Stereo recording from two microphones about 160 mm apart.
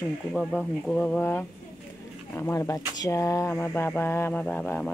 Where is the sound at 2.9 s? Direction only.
20° left (ahead or behind).